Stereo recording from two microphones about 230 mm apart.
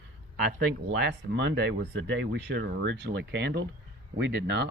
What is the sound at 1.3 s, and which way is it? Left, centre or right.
Speech, right.